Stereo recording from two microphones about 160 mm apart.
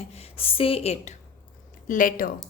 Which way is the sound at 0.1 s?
40° left (ahead or behind).